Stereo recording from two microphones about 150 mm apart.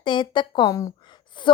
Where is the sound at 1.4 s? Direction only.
30° left (ahead or behind).